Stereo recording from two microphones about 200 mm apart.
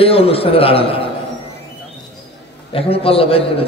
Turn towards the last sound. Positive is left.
turn(degrees=30)  # may be behind; listen again after turning